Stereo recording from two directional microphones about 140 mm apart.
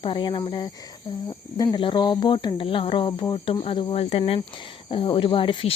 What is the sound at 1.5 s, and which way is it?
Speech, 30° left (ahead or behind).